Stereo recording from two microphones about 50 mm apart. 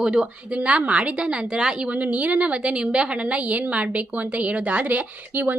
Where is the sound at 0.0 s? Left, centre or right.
Centre.